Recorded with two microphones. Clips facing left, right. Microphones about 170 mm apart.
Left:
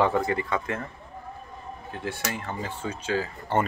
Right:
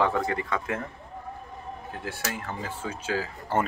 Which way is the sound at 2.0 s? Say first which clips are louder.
Left 3 dB; centre (ahead or behind).